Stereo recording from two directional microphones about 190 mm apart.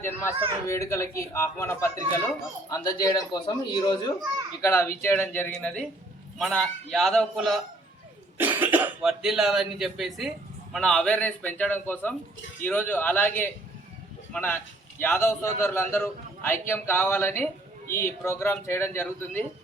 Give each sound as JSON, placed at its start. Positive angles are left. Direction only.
{"t": 0.7, "sound": "a man's voice", "side_deg": 15}